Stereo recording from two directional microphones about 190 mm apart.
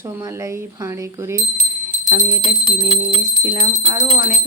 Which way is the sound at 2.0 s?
15° right (ahead or behind).